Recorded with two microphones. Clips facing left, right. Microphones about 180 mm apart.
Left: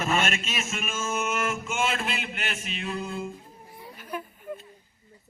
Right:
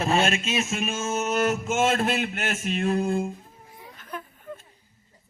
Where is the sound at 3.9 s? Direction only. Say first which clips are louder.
Left 2 dB; 10° left (ahead or behind).